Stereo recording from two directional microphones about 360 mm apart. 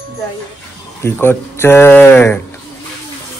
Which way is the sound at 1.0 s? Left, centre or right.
Centre.